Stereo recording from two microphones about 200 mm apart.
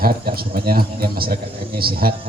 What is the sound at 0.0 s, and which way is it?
Speech, 50° right (ahead or behind).